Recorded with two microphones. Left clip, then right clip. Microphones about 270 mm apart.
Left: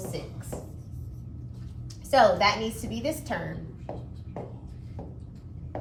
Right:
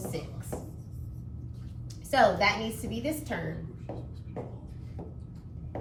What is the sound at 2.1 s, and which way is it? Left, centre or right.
Speech, centre.